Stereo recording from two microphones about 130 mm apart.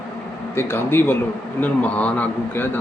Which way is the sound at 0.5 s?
20° left (ahead or behind).